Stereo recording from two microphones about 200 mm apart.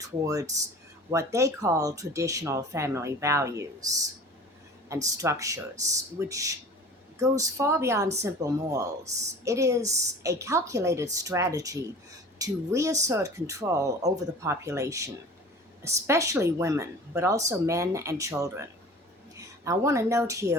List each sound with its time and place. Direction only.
0.2 s speech: 15° right (ahead or behind)